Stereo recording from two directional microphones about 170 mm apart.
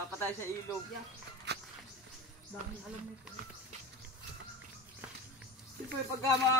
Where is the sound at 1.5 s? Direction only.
80° right.